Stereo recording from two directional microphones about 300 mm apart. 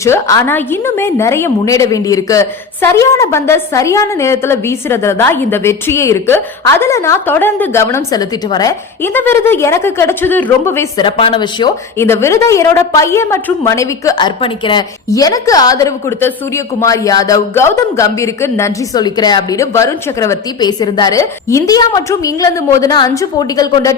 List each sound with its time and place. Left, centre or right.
0.0 s a woman's voice: centre